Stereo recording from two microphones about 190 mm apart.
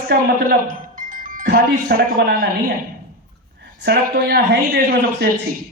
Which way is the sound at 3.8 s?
60° right (ahead or behind).